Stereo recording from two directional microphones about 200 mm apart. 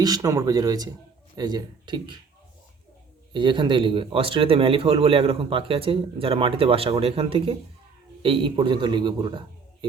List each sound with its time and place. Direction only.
0.0 s a man's voice: 15° right (ahead or behind)
3.3 s a man's voice: 25° right (ahead or behind)